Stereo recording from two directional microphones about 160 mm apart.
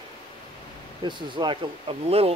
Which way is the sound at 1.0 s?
30° right (ahead or behind).